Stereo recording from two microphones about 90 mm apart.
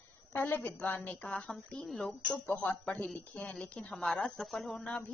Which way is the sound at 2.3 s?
15° left (ahead or behind).